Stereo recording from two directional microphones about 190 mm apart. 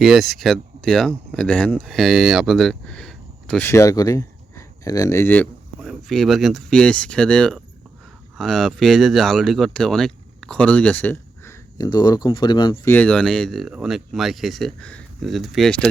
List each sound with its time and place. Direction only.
0.0 s speech: centre (ahead or behind)
3.7 s speech: 15° left (ahead or behind)
5.8 s speech: centre (ahead or behind); by 12.9 s 25° left (ahead or behind)
12.9 s speech: 5° left (ahead or behind)